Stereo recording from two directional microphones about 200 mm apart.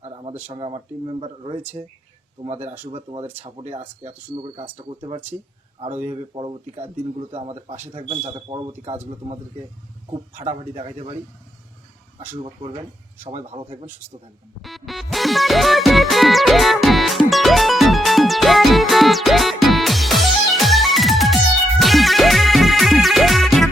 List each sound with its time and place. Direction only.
0.0 s a sound: 25° right (ahead or behind)
0.5 s speech: 30° right (ahead or behind)
12.4 s speech: 30° right (ahead or behind)
14.6 s music: centre (ahead or behind)